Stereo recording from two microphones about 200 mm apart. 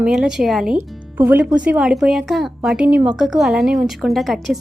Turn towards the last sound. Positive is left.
turn(degrees=0)  # may be behind; listen again after turning